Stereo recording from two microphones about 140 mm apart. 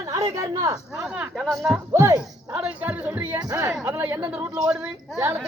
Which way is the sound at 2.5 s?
10° right (ahead or behind).